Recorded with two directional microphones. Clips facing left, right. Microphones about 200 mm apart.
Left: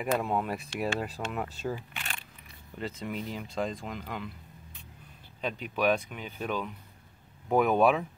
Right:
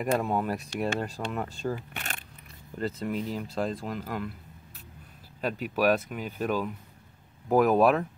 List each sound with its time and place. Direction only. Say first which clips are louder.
0.2 s speech: right 2 dB; centre (ahead or behind)
2.0 s a sound: right 3 dB; 40° right (ahead or behind)
2.8 s speech: right 5 dB; centre (ahead or behind)
5.4 s speech: right 3 dB; 5° right (ahead or behind)